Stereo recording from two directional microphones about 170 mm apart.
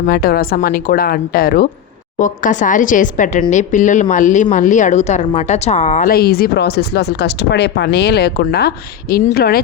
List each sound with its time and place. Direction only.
0.0 s a woman's voice: 60° left (ahead or behind)